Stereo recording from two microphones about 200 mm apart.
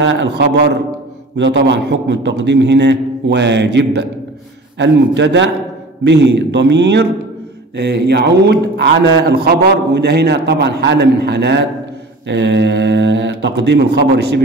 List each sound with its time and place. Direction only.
0.0 s a man's voice: 65° right (ahead or behind)